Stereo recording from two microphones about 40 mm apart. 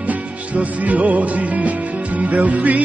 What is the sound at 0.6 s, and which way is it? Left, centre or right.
Music, right.